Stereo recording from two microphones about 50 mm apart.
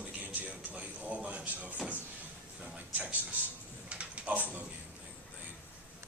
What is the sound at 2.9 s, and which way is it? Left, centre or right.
Speech, right.